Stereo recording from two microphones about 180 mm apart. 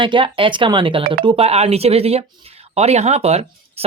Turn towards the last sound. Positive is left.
turn(degrees=-35)  # may be behind; listen again after turning